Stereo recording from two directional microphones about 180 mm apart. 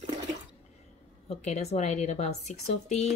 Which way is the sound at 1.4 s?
35° left (ahead or behind).